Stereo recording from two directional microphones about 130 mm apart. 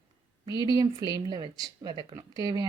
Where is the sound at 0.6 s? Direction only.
30° right (ahead or behind).